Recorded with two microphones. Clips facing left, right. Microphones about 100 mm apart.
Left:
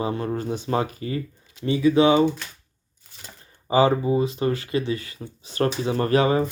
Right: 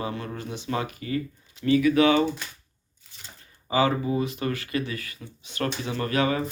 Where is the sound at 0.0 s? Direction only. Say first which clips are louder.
Left 6 dB; 30° left (ahead or behind).